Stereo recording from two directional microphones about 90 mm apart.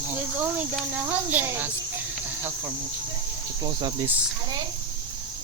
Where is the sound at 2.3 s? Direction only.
20° right (ahead or behind).